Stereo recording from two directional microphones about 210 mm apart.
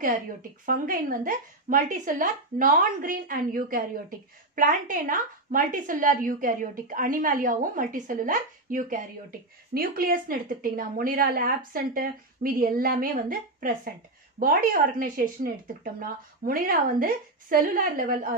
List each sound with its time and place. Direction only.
0.0 s a woman's voice: 40° right (ahead or behind)